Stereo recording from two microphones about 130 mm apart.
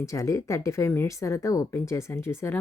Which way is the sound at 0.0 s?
25° left (ahead or behind).